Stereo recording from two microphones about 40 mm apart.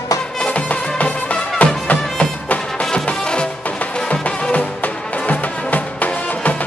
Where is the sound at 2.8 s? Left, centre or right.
Left.